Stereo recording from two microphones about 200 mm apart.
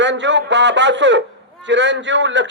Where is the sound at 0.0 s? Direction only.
65° right (ahead or behind).